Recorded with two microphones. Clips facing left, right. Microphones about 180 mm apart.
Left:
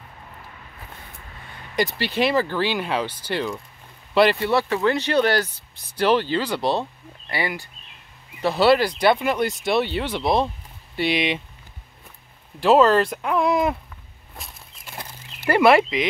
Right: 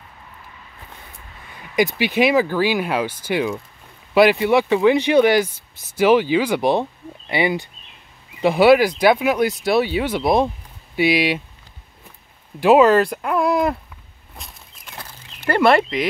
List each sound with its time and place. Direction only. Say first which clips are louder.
2.0 s speech: right 4 dB; 10° right (ahead or behind)
5.5 s speech: right 1 dB; 45° right (ahead or behind)
5.9 s speech: right 5 dB; 10° right (ahead or behind)
12.6 s speech: right 3 dB; 10° right (ahead or behind)
14.3 s a sound: even; centre (ahead or behind)